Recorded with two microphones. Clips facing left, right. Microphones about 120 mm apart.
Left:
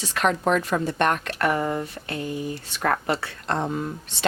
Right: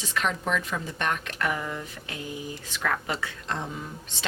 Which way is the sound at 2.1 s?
60° left (ahead or behind).